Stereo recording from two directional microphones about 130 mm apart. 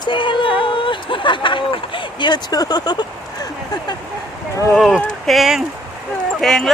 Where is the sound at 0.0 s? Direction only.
40° left (ahead or behind).